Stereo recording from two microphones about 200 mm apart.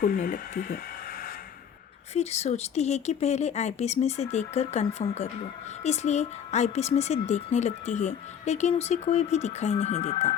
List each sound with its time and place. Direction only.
0.2 s speech: 40° left (ahead or behind)
2.1 s a woman's voice: 30° left (ahead or behind)